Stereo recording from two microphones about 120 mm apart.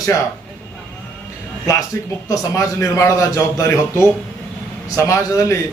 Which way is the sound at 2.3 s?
25° left (ahead or behind).